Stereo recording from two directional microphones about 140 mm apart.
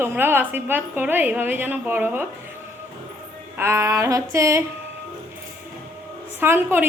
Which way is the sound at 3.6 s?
20° right (ahead or behind).